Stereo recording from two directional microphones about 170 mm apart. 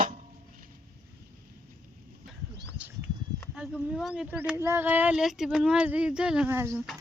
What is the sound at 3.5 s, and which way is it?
Speech, centre (ahead or behind).